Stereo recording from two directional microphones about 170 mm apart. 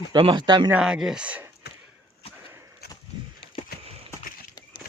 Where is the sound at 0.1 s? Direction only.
25° right (ahead or behind).